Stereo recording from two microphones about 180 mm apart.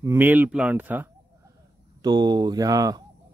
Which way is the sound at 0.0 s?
15° right (ahead or behind).